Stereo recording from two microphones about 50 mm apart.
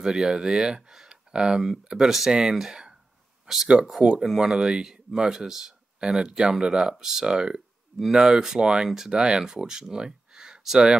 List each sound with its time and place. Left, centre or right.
0.0 s speech: centre